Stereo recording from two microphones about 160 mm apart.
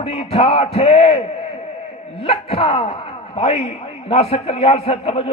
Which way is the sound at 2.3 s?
40° left (ahead or behind).